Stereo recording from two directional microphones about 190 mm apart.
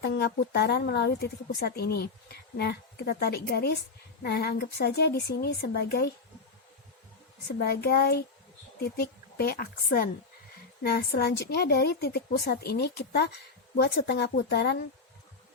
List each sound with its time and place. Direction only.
0.0 s a woman's voice: 60° left (ahead or behind)
7.8 s a woman's voice: 55° left (ahead or behind)